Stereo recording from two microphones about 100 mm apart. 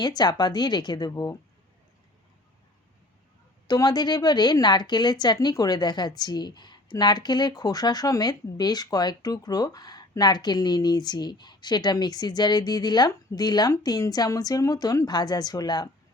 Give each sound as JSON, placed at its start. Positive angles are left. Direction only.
{"t": 0.0, "sound": "speech", "side_deg": 45}
{"t": 3.7, "sound": "a woman's voice", "side_deg": 40}